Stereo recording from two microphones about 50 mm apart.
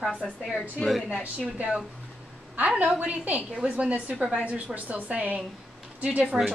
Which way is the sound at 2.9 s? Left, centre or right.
Right.